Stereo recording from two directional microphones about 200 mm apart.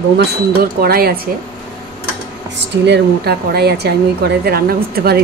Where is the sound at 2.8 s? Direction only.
55° right (ahead or behind).